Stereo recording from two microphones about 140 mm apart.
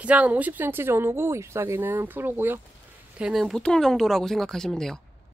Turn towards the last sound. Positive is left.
turn(degrees=5)  # may be behind; listen again after turning